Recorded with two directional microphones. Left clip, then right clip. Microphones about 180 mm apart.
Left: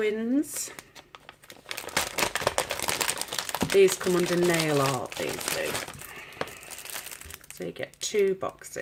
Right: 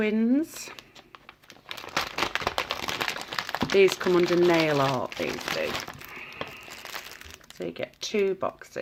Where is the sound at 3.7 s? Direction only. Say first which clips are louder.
Even; 25° right (ahead or behind).